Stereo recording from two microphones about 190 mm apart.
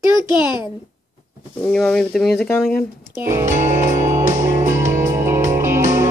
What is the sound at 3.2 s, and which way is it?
Speech, 15° right (ahead or behind).